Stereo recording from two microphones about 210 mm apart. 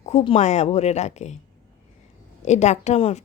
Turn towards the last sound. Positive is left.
turn(degrees=30)  # may be behind; listen again after turning